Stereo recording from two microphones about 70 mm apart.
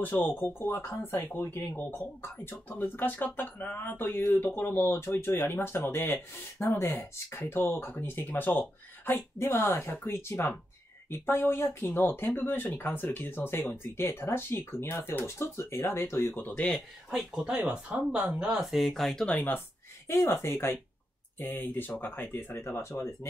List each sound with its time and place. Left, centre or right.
0.0 s speech: left
9.6 s speech: left
9.8 s speech: left
17.1 s speech: centre
17.6 s speech: right
18.4 s speech: centre
19.2 s speech: left
20.1 s speech: left
21.4 s speech: left